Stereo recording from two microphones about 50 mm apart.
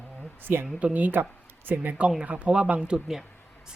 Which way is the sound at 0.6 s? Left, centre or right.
Right.